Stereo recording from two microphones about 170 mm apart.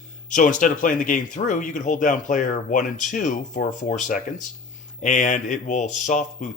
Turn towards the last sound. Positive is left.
turn(degrees=45)  # may be behind; listen again after turning